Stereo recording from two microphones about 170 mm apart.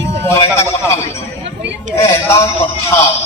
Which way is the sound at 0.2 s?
15° left (ahead or behind).